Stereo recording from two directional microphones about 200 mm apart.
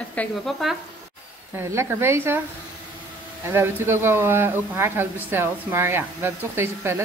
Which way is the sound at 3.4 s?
10° right (ahead or behind).